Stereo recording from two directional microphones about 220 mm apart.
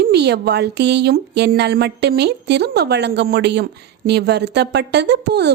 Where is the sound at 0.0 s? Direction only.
50° right (ahead or behind).